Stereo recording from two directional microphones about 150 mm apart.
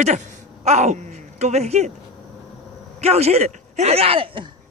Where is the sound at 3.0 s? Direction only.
45° right (ahead or behind).